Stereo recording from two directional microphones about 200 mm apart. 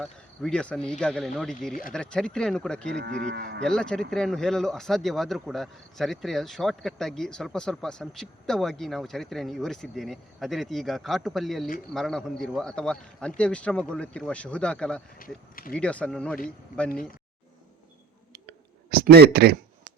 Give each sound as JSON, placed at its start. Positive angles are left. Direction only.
{"t": 0.0, "sound": "speech", "side_deg": 5}
{"t": 2.9, "sound": "livestock", "side_deg": -55}
{"t": 3.6, "sound": "speech", "side_deg": 5}
{"t": 18.4, "sound": "a sound", "side_deg": -50}